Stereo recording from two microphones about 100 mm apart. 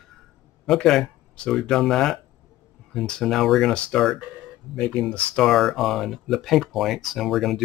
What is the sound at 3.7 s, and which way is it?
Speech, 10° left (ahead or behind).